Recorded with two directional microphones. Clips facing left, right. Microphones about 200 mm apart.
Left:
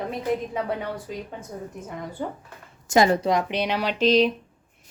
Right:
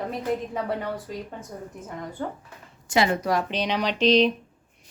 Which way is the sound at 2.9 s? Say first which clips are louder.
Left 4 dB; 45° left (ahead or behind).